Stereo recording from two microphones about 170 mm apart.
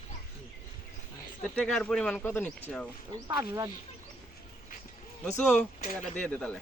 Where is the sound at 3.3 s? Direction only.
25° right (ahead or behind).